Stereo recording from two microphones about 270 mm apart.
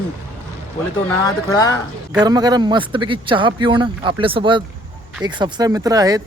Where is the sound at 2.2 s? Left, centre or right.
Centre.